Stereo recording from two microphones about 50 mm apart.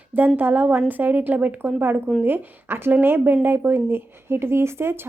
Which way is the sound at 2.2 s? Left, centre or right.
Right.